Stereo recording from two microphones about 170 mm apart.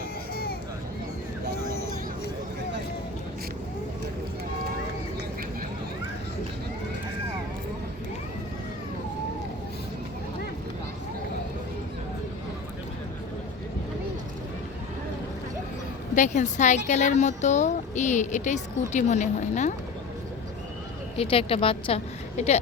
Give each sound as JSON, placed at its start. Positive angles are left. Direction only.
{"t": 16.1, "sound": "speech", "side_deg": 45}
{"t": 21.2, "sound": "a woman's voice", "side_deg": 35}